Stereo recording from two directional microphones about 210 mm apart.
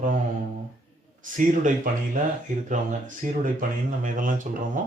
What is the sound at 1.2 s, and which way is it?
Speech, 40° right (ahead or behind).